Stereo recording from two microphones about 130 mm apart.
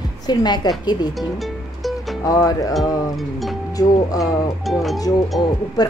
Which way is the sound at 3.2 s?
Centre (ahead or behind).